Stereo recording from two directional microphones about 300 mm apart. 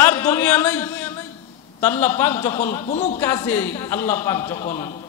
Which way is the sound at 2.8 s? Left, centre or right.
Left.